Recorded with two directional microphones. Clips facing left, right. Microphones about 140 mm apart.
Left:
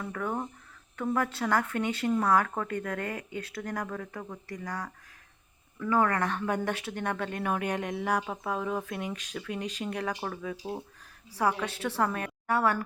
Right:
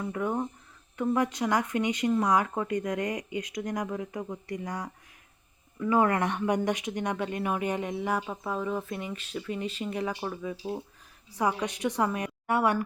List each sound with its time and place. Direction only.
0.0 s speech: 15° right (ahead or behind)